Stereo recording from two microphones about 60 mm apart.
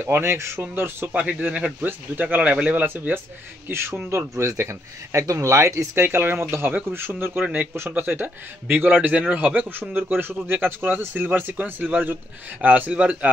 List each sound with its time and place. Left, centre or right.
0.0 s speech: right
1.1 s speech: right
3.6 s speech: right
4.5 s speech: right
5.9 s speech: right
9.1 s a man's voice: centre
9.7 s speech: right